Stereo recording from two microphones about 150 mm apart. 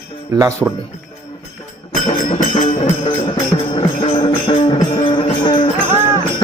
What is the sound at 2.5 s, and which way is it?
Music, 40° left (ahead or behind).